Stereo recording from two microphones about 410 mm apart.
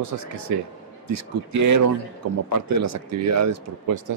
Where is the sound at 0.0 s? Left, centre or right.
Right.